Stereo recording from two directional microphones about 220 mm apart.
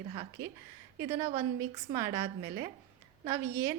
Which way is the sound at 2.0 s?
15° right (ahead or behind).